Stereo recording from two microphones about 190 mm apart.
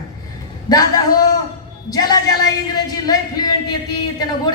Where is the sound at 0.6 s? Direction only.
20° left (ahead or behind).